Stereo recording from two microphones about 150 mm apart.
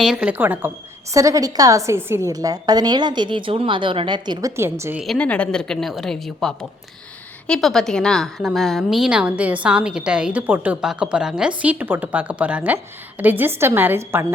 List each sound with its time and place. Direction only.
0.0 s a woman's voice: 5° right (ahead or behind)
5.0 s a woman's voice: 10° left (ahead or behind); by 14.3 s 15° right (ahead or behind)